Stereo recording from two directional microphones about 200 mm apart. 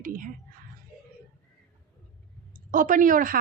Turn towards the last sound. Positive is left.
turn(degrees=-45)  # may be behind; listen again after turning